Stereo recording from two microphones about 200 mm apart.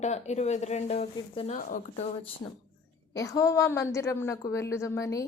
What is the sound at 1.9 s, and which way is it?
Speech, 30° left (ahead or behind).